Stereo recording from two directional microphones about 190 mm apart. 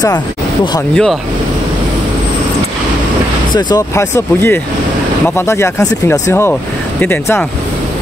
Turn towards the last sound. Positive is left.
turn(degrees=10)  # may be behind; listen again after turning